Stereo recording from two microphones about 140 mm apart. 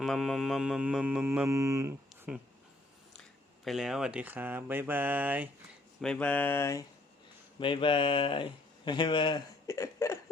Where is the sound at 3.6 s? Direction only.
5° right (ahead or behind).